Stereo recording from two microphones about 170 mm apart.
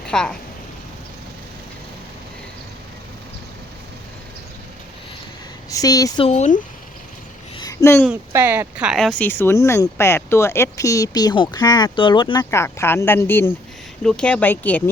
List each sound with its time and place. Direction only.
0.1 s a woman's voice: 5° left (ahead or behind)
5.7 s speech: 20° left (ahead or behind)
6.2 s speech: 45° left (ahead or behind)
7.5 s a sound: 20° left (ahead or behind)
8.3 s speech: 10° right (ahead or behind); by 12.5 s 25° left (ahead or behind)
12.5 s speech: 15° left (ahead or behind)